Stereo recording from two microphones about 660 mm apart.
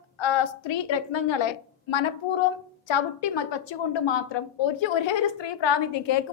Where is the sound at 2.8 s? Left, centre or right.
Left.